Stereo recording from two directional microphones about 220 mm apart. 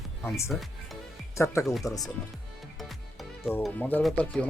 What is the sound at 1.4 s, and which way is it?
Speech, 10° left (ahead or behind).